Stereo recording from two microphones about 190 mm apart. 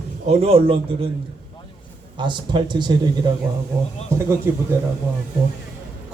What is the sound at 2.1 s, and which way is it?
Speech, 25° right (ahead or behind).